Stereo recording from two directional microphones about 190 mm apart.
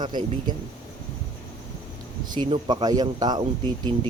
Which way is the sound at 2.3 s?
25° right (ahead or behind).